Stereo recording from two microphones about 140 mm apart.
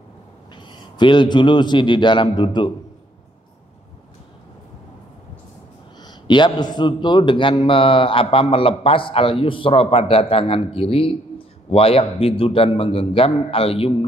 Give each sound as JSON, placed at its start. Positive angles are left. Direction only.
{"t": 0.7, "sound": "a man's voice", "side_deg": 35}
{"t": 6.0, "sound": "a man's voice", "side_deg": 35}